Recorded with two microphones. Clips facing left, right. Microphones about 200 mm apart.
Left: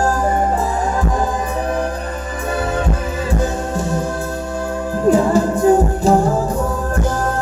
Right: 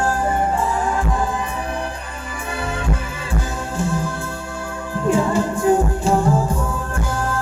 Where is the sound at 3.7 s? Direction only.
40° left (ahead or behind).